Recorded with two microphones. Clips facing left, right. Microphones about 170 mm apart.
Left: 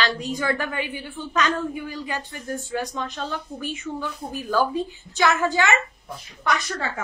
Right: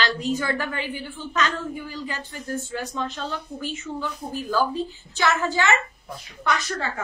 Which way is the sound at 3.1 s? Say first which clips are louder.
Left 1 dB; 15° left (ahead or behind).